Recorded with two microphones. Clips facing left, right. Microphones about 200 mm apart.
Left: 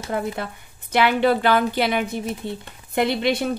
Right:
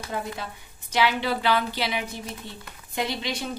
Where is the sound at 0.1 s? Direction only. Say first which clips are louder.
Left 6 dB; 55° left (ahead or behind).